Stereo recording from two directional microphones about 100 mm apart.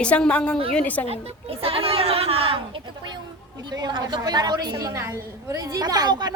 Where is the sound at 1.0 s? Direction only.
80° right; by 3.2 s 55° right (ahead or behind).